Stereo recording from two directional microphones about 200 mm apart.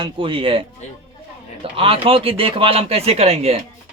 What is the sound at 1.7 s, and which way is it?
Speech, 30° right (ahead or behind).